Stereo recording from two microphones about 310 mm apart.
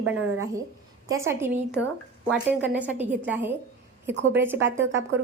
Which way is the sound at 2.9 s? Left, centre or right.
Centre.